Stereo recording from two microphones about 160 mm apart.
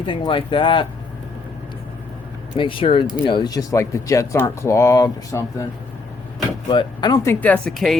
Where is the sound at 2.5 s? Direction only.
30° left (ahead or behind).